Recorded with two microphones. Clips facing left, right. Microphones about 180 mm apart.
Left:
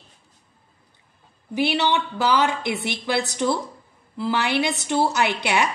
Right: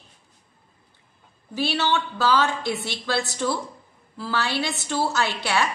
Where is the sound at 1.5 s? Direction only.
15° left (ahead or behind).